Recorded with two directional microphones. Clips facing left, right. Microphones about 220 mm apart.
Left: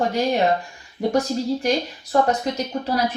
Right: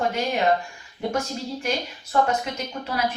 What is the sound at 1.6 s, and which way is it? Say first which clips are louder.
A woman's voice: left 6 dB; 35° left (ahead or behind).